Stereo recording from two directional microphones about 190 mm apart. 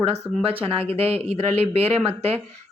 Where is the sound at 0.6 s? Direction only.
30° right (ahead or behind).